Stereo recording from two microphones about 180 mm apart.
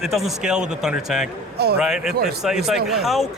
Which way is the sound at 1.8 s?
5° right (ahead or behind).